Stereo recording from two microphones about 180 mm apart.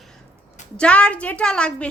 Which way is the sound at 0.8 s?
5° left (ahead or behind).